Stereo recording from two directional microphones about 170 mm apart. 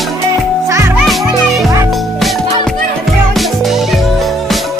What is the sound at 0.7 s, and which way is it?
Music, 15° right (ahead or behind).